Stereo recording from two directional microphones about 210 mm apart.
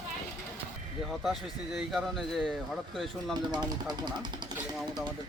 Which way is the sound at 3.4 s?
20° right (ahead or behind).